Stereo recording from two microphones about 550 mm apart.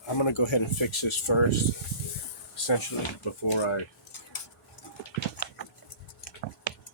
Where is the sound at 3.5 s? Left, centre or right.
Left.